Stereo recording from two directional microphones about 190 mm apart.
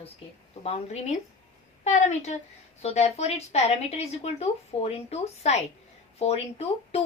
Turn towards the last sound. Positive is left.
turn(degrees=30)  # may be behind; listen again after turning